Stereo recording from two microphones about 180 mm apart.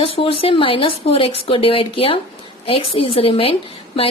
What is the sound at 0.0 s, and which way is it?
Speech, 30° left (ahead or behind).